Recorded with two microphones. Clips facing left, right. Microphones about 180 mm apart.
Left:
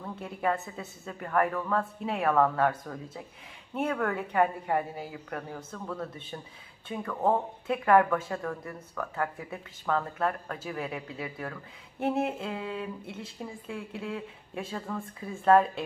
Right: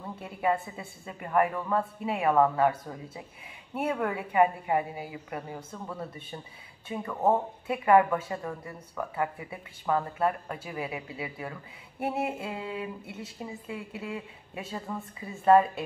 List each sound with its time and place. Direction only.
0.0 s speech: 5° right (ahead or behind)